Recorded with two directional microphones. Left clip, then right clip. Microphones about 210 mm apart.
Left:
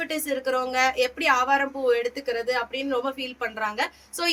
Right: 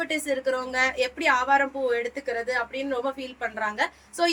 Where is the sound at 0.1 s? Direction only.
15° left (ahead or behind).